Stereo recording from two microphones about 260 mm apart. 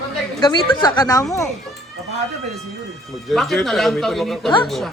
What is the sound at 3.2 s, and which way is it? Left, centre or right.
Speech, centre.